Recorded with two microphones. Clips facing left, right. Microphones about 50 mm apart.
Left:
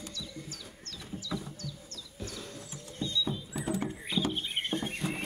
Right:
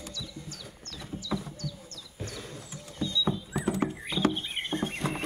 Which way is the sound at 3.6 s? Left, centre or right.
Right.